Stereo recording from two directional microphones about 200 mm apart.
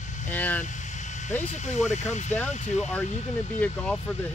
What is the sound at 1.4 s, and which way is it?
Speech, 35° left (ahead or behind).